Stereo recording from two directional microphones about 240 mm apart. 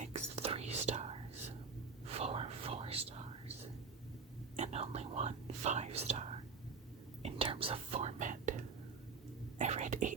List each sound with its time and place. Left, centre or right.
0.0 s whispering: right
4.5 s whispering: right
9.6 s whispering: right